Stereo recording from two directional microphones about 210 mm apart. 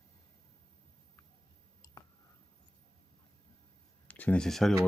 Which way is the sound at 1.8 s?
15° left (ahead or behind).